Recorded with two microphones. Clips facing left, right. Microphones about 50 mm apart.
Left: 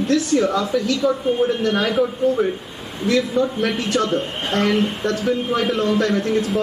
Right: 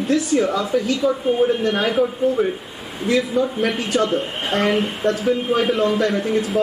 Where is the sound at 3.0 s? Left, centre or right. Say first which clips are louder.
Even; centre.